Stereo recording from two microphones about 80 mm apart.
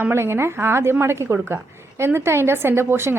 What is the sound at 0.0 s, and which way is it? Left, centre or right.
A woman's voice, right.